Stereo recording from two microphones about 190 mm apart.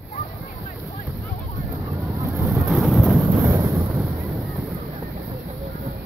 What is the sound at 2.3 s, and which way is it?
Vehicle, centre (ahead or behind).